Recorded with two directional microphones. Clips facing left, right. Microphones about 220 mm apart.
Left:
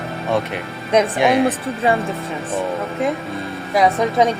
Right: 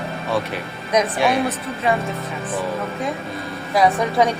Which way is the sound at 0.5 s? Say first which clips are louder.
Left 3 dB; 25° left (ahead or behind).